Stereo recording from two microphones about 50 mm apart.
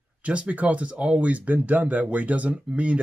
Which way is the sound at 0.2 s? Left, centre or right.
Right.